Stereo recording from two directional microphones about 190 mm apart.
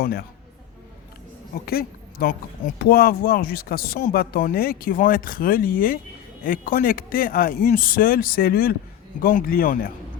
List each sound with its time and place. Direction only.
0.0 s speech: 50° left (ahead or behind)
1.6 s speech: 55° left (ahead or behind)